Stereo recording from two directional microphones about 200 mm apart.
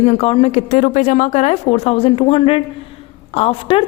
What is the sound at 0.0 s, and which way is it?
A woman's voice, 30° left (ahead or behind).